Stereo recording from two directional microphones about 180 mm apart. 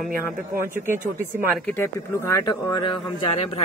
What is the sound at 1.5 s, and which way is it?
Speech, 10° left (ahead or behind).